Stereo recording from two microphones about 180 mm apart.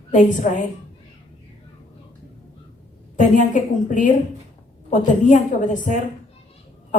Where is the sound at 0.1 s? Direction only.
45° left (ahead or behind).